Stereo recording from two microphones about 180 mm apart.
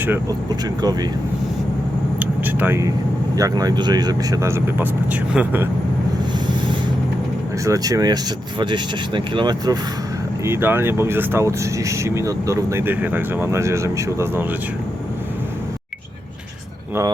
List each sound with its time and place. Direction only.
0.0 s speech: 10° right (ahead or behind)
2.1 s vehicle: 10° right (ahead or behind)
3.3 s speech: 20° right (ahead or behind)
7.6 s speech: 20° right (ahead or behind)
10.4 s speech: 10° right (ahead or behind)